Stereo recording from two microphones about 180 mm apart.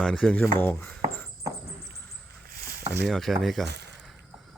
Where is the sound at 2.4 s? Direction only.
55° right (ahead or behind).